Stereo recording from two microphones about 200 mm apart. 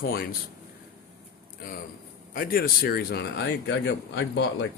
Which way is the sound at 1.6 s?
45° left (ahead or behind).